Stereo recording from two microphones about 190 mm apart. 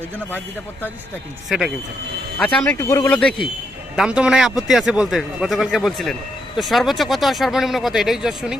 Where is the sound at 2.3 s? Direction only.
5° left (ahead or behind).